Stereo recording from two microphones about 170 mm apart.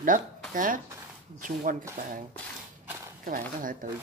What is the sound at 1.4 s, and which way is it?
Speech, 55° right (ahead or behind).